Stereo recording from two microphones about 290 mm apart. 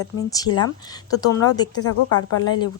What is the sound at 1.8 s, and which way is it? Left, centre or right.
Speech, left.